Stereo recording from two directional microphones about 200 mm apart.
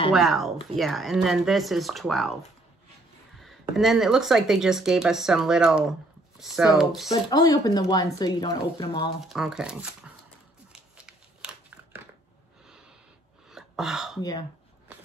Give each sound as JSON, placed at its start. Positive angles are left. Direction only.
{"t": 0.1, "sound": "speech", "side_deg": 0}
{"t": 3.3, "sound": "speech", "side_deg": 0}
{"t": 7.1, "sound": "speech", "side_deg": 20}
{"t": 9.3, "sound": "speech", "side_deg": 0}
{"t": 10.7, "sound": "a sound", "side_deg": -5}
{"t": 13.5, "sound": "a sound", "side_deg": 0}